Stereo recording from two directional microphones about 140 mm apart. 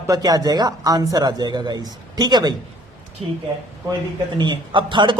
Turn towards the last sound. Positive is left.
turn(degrees=-35)  # may be behind; listen again after turning